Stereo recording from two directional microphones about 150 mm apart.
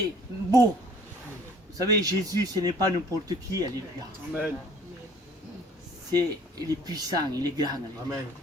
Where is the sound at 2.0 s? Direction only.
25° right (ahead or behind).